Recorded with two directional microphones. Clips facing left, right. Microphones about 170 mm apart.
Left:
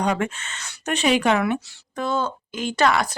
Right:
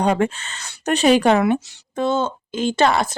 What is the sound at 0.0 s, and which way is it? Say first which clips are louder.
Speech: right 5 dB; 30° right (ahead or behind).